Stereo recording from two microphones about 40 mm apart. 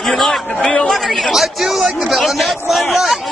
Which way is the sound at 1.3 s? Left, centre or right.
Centre.